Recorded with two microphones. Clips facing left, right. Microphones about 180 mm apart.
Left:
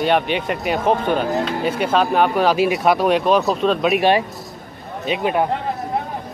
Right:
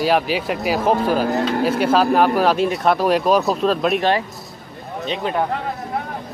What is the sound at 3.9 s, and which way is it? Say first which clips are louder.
Speech: left 3 dB; 15° left (ahead or behind).